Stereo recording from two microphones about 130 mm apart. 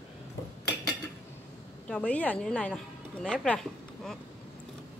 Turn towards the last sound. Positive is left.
turn(degrees=5)  # may be behind; listen again after turning